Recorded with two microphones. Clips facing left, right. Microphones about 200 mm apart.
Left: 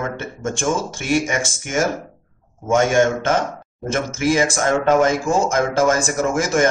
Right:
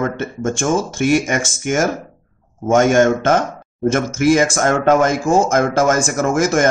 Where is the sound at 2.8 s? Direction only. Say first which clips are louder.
Right 3 dB; 45° right (ahead or behind).